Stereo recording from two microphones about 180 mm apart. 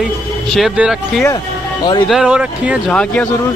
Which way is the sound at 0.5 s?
Centre (ahead or behind).